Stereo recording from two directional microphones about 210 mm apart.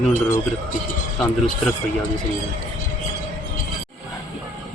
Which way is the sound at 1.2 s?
Centre (ahead or behind).